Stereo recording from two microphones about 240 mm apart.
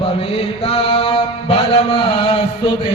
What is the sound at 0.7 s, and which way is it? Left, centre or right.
Mantra, left.